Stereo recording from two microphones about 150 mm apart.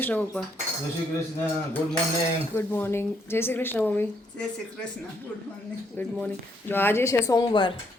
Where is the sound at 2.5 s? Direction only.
15° left (ahead or behind).